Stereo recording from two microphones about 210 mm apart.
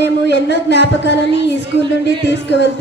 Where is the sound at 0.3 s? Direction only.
55° left (ahead or behind).